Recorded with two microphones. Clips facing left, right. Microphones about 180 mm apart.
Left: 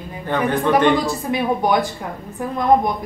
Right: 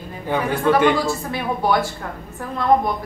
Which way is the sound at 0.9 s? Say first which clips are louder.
Left 2 dB; 15° left (ahead or behind).